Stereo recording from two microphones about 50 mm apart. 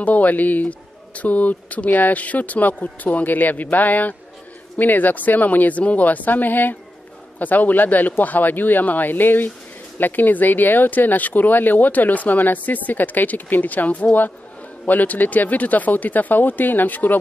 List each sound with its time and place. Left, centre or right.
0.0 s speech: left